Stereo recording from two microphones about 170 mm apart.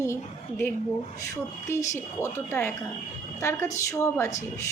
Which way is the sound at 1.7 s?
15° left (ahead or behind).